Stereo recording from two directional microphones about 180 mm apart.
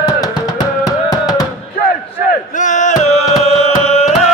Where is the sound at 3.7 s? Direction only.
35° left (ahead or behind).